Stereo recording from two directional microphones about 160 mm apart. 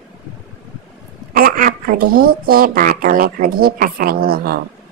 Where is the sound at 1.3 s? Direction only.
65° right (ahead or behind).